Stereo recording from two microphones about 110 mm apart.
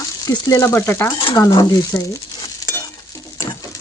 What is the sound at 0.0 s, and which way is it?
Speech, 35° left (ahead or behind).